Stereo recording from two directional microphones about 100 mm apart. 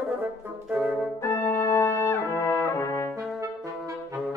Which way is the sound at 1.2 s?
25° left (ahead or behind).